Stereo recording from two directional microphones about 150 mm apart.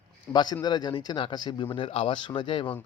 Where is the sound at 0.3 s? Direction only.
30° left (ahead or behind).